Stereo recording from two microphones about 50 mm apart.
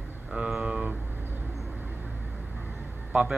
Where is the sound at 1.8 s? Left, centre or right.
Right.